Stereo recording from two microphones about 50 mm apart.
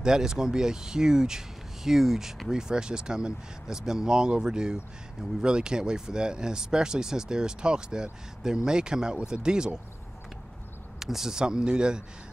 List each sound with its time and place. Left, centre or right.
0.0 s speech: centre
11.0 s speech: centre